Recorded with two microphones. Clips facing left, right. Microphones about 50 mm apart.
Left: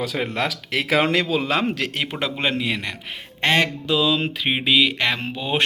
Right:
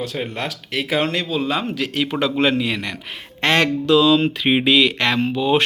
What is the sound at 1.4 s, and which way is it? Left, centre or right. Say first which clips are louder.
Speech: even; left.